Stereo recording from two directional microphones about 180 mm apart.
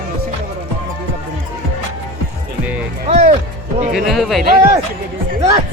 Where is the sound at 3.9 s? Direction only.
Centre (ahead or behind).